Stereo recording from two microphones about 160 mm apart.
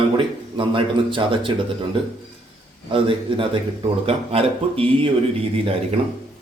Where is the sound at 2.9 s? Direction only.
35° right (ahead or behind).